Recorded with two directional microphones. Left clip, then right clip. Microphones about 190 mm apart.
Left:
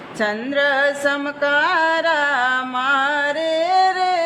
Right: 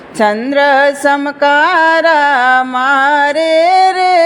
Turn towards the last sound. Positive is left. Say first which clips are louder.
# right 8 dB
turn(degrees=-35)  # may be behind; listen again after turning